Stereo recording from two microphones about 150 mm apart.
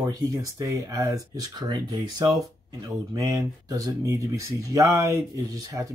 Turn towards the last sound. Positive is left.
turn(degrees=-20)  # may be behind; listen again after turning